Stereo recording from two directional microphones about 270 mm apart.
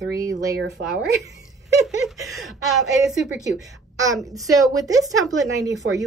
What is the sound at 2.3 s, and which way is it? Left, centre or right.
A woman's voice, centre.